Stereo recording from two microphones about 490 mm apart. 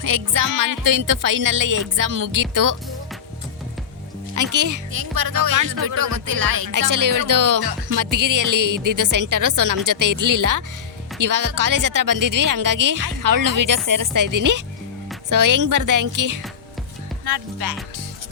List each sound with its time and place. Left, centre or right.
0.0 s speech: right
4.5 s speech: right